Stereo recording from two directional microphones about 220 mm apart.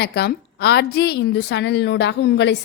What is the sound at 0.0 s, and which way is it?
A woman's voice, 45° left (ahead or behind).